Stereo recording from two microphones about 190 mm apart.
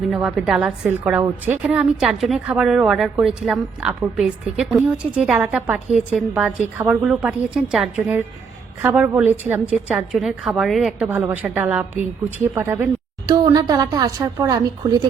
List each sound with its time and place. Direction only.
0.1 s a woman's voice: 5° right (ahead or behind); by 15.0 s 20° right (ahead or behind)